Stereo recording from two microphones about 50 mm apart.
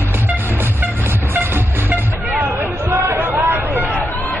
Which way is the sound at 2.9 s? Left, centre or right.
Right.